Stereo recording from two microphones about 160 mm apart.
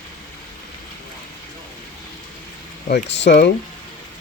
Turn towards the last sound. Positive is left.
turn(degrees=90)